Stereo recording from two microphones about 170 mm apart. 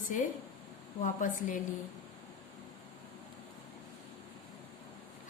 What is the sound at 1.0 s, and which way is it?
Speech, 50° left (ahead or behind).